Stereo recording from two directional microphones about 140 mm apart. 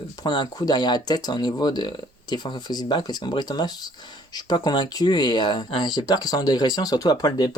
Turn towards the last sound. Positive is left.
turn(degrees=30)  # may be behind; listen again after turning